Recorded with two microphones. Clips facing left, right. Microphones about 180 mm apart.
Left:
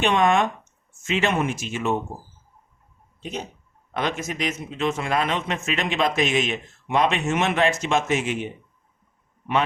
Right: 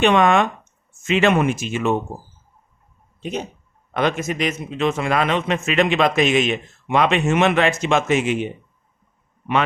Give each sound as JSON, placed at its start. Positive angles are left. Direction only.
{"t": 0.0, "sound": "a man's voice", "side_deg": -75}
{"t": 3.9, "sound": "a man's voice", "side_deg": -65}